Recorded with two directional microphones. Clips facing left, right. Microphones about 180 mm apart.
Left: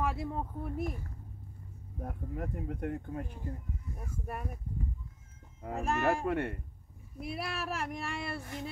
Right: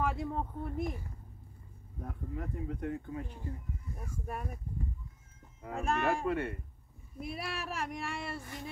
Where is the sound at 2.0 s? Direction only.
50° left (ahead or behind).